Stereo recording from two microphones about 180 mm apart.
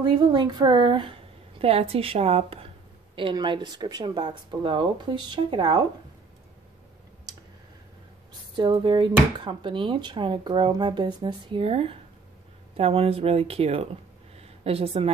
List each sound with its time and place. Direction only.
0.0 s speech: 25° right (ahead or behind)
8.5 s speech: 25° right (ahead or behind)
14.3 s a sound: 35° right (ahead or behind)